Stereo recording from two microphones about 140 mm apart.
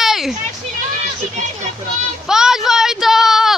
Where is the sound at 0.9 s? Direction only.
55° right (ahead or behind).